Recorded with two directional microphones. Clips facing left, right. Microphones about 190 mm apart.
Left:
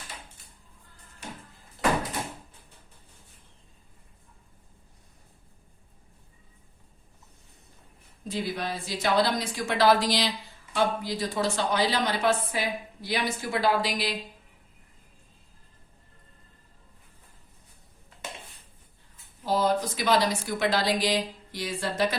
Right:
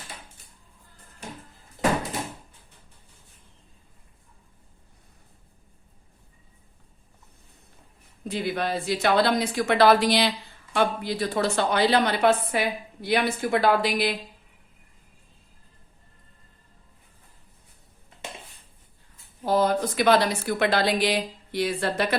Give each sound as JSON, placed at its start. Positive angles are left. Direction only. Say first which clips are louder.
{"t": 8.3, "sound": "a woman's voice", "louder": "right 4 dB", "side_deg": -60}
{"t": 19.5, "sound": "a woman's voice", "louder": "right 3 dB", "side_deg": -55}